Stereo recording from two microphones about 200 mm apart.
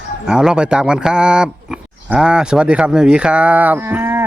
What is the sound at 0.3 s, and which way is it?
Speech, 5° right (ahead or behind).